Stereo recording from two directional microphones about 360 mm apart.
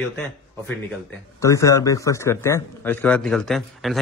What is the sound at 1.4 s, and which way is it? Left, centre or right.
A man's voice, centre.